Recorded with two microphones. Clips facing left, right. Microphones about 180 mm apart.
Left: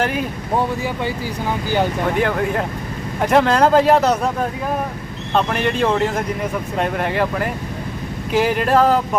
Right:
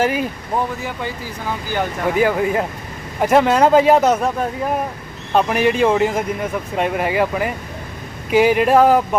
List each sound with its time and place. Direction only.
0.0 s speech: 5° right (ahead or behind)
2.0 s speech: 5° right (ahead or behind)
5.3 s speech: 5° right (ahead or behind)